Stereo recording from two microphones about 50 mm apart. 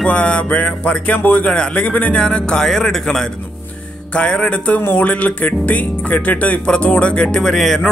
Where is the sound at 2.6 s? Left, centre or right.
Centre.